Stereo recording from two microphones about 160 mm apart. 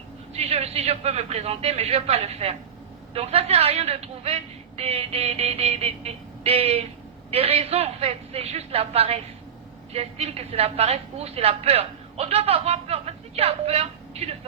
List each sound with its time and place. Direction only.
0.3 s a woman's voice: 40° right (ahead or behind)